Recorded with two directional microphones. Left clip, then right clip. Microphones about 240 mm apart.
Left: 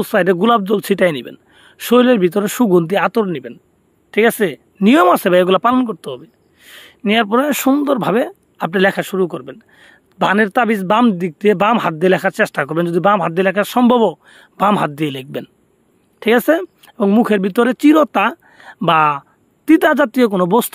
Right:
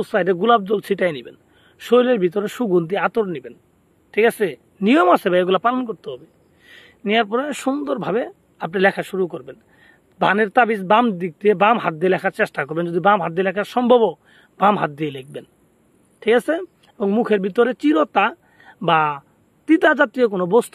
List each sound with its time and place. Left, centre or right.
0.0 s speech: left